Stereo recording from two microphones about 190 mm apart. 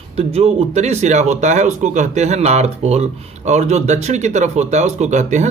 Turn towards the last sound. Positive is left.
turn(degrees=-40)  # may be behind; listen again after turning